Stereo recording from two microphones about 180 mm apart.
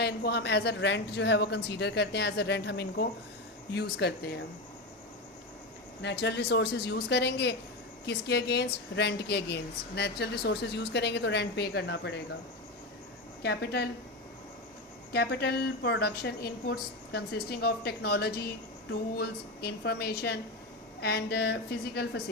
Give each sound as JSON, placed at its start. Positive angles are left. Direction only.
{"t": 0.0, "sound": "a woman's voice", "side_deg": 65}
{"t": 6.0, "sound": "a woman's voice", "side_deg": 70}
{"t": 13.4, "sound": "a woman's voice", "side_deg": 65}
{"t": 15.1, "sound": "a woman's voice", "side_deg": 65}